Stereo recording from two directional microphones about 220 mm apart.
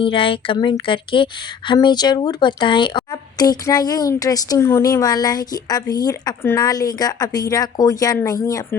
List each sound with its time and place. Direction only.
0.0 s speech: 25° left (ahead or behind)